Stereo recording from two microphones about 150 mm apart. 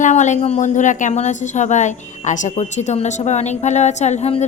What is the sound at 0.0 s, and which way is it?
A woman's voice, 55° left (ahead or behind).